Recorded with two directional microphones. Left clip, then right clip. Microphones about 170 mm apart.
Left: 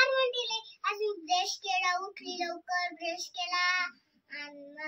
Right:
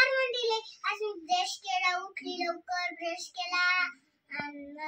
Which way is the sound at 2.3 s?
35° left (ahead or behind).